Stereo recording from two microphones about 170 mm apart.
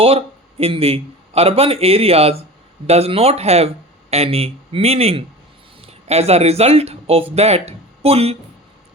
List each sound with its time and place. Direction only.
0.6 s a man's voice: 35° right (ahead or behind)